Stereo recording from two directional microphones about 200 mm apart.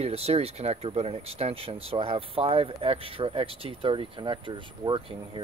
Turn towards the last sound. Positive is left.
turn(degrees=-25)  # may be behind; listen again after turning